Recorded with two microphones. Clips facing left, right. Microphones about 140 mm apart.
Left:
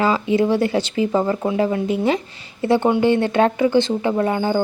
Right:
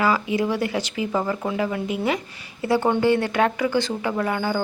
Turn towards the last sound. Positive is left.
turn(degrees=25)  # may be behind; listen again after turning